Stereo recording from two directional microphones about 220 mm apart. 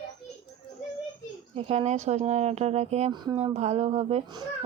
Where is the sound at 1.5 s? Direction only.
25° right (ahead or behind).